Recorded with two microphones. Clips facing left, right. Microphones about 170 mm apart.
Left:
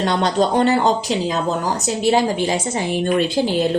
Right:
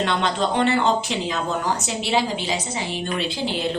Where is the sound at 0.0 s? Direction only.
40° left (ahead or behind).